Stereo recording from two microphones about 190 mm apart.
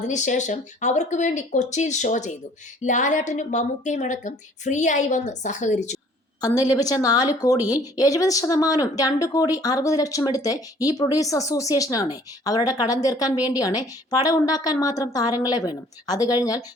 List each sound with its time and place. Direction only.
0.1 s speech: 40° left (ahead or behind)
6.4 s a woman's voice: 20° left (ahead or behind)